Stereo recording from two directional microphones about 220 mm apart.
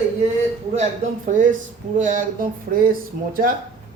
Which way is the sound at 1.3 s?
35° right (ahead or behind).